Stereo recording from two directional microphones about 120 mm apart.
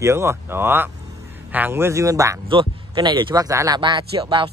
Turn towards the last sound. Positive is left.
turn(degrees=-45)  # may be behind; listen again after turning